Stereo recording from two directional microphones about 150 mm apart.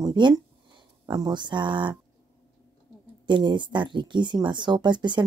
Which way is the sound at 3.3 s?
30° right (ahead or behind).